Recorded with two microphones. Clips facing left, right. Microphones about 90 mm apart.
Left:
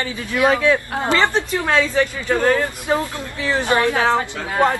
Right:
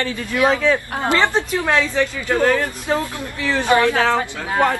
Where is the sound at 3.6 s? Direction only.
20° right (ahead or behind).